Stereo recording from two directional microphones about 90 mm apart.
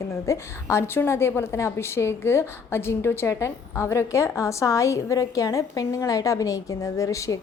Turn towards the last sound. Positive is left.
turn(degrees=40)  # may be behind; listen again after turning